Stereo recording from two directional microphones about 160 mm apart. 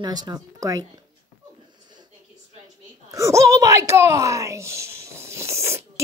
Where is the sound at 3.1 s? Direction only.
20° right (ahead or behind).